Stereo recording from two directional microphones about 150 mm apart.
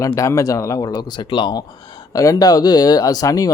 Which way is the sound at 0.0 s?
20° left (ahead or behind).